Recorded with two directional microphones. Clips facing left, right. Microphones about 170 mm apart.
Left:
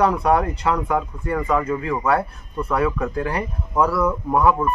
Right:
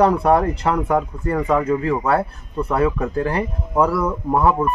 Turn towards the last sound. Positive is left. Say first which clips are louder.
# right 1 dB
turn(degrees=-30)  # may be behind; listen again after turning